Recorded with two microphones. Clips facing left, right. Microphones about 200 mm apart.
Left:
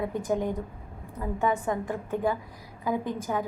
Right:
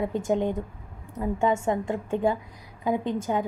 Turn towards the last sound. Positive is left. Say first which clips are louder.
# right 3 dB
turn(degrees=-25)  # may be behind; listen again after turning